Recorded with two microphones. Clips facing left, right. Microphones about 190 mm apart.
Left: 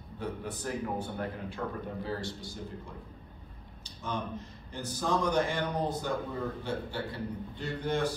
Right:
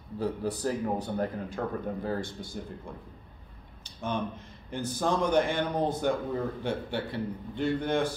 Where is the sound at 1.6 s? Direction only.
50° right (ahead or behind).